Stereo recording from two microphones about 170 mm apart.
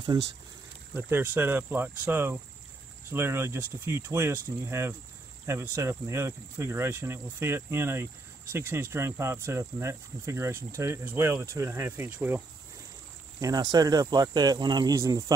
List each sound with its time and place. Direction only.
0.9 s speech: 15° right (ahead or behind)
13.4 s speech: 20° right (ahead or behind)